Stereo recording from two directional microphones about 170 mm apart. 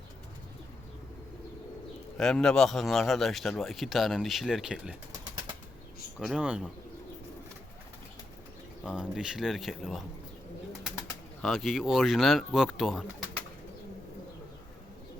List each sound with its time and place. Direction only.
2.1 s a man's voice: 5° left (ahead or behind)
6.1 s a man's voice: 5° right (ahead or behind)
8.8 s a man's voice: 5° right (ahead or behind)
11.4 s a man's voice: centre (ahead or behind)